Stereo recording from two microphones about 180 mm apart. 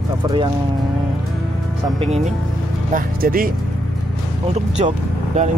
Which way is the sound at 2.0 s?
35° right (ahead or behind).